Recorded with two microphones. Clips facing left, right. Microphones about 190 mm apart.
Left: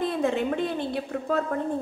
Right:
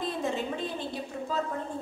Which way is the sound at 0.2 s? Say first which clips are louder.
Left 6 dB; 60° left (ahead or behind).